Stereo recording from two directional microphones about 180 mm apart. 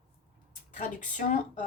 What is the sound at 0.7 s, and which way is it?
Speech, 45° left (ahead or behind).